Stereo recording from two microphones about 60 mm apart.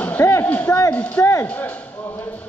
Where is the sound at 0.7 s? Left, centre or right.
Left.